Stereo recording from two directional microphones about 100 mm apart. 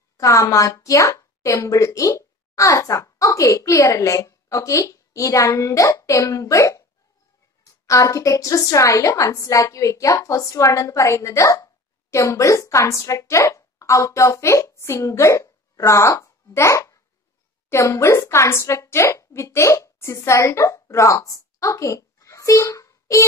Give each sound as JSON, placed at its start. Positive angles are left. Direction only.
{"t": 0.2, "sound": "a woman's voice", "side_deg": 30}